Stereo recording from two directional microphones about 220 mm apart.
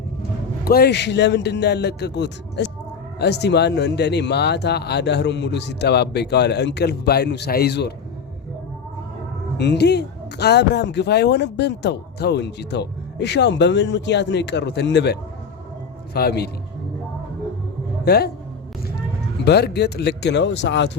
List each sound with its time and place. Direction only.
0.6 s speech: 45° left (ahead or behind)
9.6 s speech: 50° left (ahead or behind)
18.0 s a man's voice: 45° left (ahead or behind)
19.5 s speech: 50° left (ahead or behind)